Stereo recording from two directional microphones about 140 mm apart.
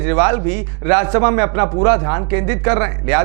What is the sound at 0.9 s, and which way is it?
Speech, 20° right (ahead or behind).